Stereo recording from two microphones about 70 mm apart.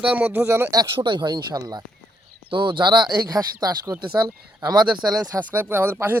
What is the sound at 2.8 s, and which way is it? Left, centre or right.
Speech, right.